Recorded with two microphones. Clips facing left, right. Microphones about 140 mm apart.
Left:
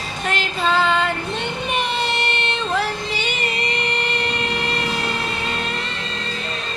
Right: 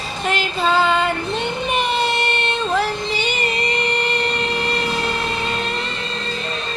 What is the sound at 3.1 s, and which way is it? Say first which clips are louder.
Music: right 3 dB; centre (ahead or behind).